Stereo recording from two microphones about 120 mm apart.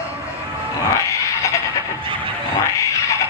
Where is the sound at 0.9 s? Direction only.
25° left (ahead or behind).